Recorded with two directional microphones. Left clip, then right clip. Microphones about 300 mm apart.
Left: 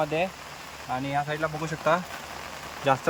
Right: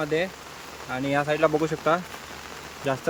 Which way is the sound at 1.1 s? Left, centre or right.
Right.